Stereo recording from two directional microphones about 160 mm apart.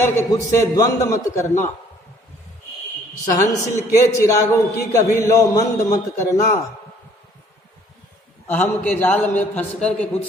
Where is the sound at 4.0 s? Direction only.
20° left (ahead or behind).